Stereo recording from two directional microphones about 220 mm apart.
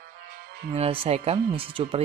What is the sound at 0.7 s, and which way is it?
Speech, 30° right (ahead or behind).